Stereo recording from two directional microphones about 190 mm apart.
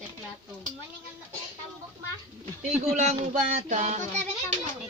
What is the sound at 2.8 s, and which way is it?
Speech, 35° right (ahead or behind).